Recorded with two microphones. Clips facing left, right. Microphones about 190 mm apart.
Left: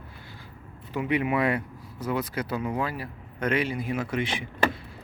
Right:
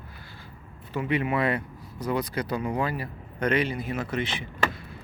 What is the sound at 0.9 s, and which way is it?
Speech, 15° left (ahead or behind).